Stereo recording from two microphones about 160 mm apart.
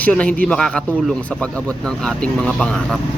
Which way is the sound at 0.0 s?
10° left (ahead or behind).